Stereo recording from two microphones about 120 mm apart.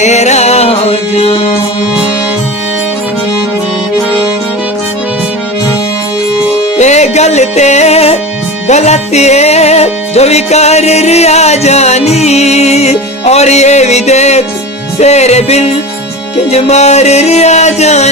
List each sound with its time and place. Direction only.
0.0 s music: 70° left (ahead or behind)
6.7 s music: 70° left (ahead or behind)